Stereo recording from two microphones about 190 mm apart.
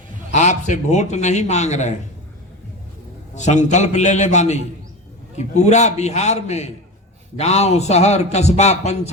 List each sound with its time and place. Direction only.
0.3 s a man's voice: 40° left (ahead or behind)
3.3 s a man's voice: 40° left (ahead or behind)